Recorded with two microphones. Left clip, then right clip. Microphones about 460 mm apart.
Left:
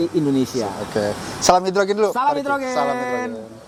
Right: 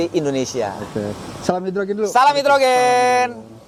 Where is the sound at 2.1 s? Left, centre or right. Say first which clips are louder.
Right 6 dB; right.